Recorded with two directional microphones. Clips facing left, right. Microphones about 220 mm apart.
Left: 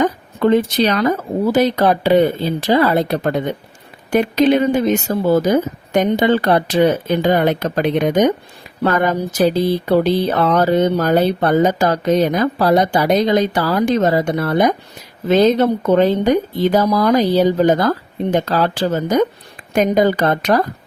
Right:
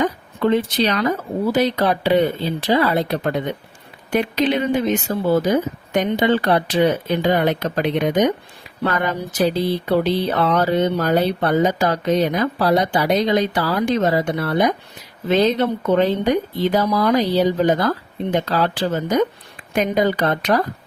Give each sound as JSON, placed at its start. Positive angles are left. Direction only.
{"t": 0.0, "sound": "speech", "side_deg": 45}